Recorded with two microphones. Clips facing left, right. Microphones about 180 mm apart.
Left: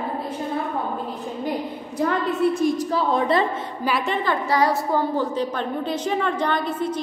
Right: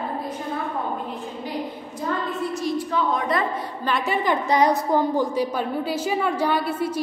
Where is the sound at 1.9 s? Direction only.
70° left (ahead or behind); by 3.4 s 30° left (ahead or behind).